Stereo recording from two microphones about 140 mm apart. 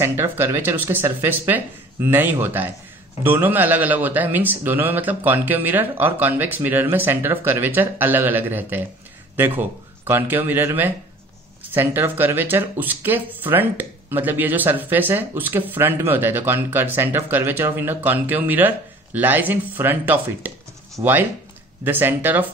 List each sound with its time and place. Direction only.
0.0 s speech: 15° right (ahead or behind)